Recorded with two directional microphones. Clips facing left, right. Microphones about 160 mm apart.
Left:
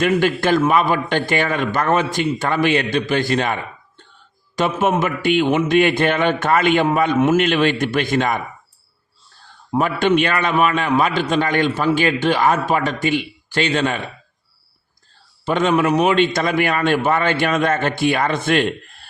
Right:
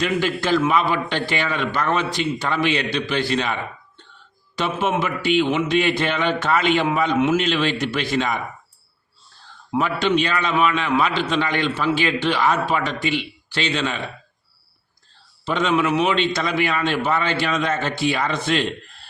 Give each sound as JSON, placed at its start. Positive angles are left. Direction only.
{"t": 0.0, "sound": "a man's voice", "side_deg": 50}
{"t": 9.7, "sound": "a man's voice", "side_deg": 50}
{"t": 15.4, "sound": "a man's voice", "side_deg": 50}